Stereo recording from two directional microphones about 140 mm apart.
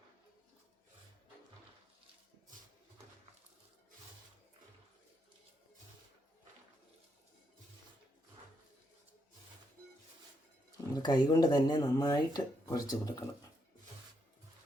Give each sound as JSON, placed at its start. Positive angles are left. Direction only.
{"t": 10.9, "sound": "speech", "side_deg": 30}